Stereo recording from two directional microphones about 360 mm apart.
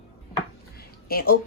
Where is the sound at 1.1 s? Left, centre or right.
Left.